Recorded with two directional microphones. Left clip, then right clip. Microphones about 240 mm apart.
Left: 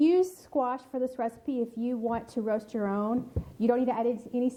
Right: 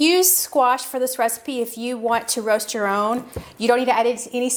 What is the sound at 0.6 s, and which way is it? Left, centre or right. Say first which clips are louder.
A woman's voice: right 12 dB; centre.